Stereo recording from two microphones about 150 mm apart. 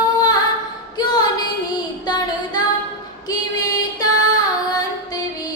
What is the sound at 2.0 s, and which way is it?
Female singing, 25° left (ahead or behind).